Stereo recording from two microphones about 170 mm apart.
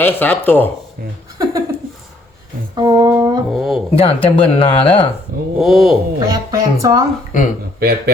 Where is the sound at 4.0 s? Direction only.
35° left (ahead or behind).